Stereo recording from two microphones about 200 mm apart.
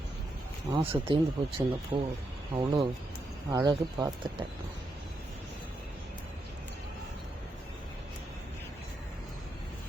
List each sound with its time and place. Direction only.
0.7 s speech: 25° right (ahead or behind)